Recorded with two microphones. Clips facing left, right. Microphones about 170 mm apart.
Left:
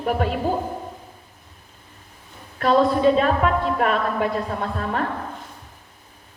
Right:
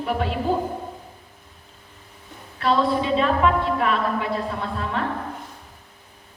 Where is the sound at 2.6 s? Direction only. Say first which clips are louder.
Left 4 dB; 45° left (ahead or behind).